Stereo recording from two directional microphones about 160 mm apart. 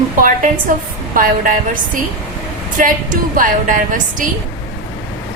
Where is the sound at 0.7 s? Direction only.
60° right (ahead or behind).